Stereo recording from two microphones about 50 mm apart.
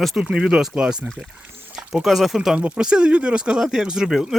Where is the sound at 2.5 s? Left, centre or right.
Right.